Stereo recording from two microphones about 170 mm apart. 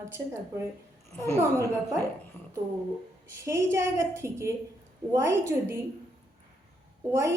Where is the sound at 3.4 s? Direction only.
15° right (ahead or behind).